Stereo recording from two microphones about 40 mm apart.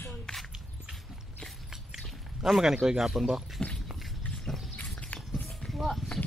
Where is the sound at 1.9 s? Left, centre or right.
Centre.